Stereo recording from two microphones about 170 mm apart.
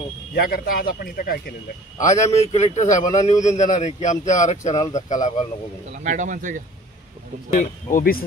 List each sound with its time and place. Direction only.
0.3 s speech: 60° left (ahead or behind)
2.2 s speech: 40° left (ahead or behind)
6.0 s speech: 50° right (ahead or behind)
7.5 s speech: 55° left (ahead or behind)